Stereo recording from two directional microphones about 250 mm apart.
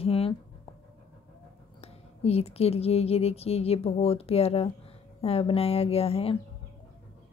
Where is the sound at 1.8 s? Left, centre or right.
Left.